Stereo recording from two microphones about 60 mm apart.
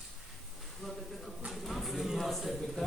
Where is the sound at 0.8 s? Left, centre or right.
Centre.